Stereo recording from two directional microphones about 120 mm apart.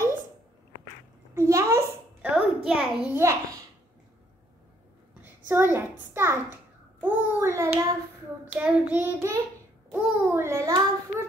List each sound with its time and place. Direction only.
1.3 s child singing: 25° right (ahead or behind)
2.2 s a child's voice: 5° right (ahead or behind)
5.2 s a child's voice: 20° right (ahead or behind)
9.8 s a child's voice: 10° right (ahead or behind)
10.3 s child singing: 20° right (ahead or behind)